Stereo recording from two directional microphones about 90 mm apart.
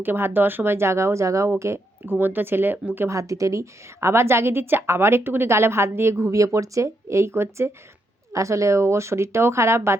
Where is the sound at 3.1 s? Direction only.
35° right (ahead or behind).